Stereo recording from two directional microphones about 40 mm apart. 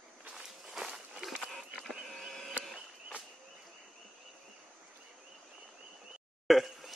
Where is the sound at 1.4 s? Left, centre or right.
Centre.